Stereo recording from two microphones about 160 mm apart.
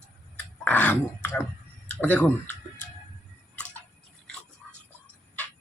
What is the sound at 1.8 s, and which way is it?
Speech, 10° left (ahead or behind).